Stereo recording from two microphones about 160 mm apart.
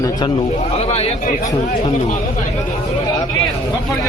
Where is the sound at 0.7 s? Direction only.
40° left (ahead or behind).